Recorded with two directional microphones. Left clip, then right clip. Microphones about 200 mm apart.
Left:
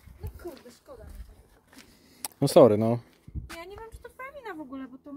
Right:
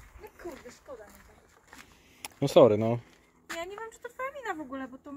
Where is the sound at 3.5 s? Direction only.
5° right (ahead or behind).